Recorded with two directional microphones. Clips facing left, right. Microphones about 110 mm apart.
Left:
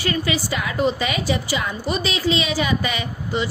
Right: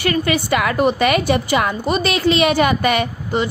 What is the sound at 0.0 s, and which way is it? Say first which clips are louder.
A woman's voice: right 4 dB; 60° right (ahead or behind).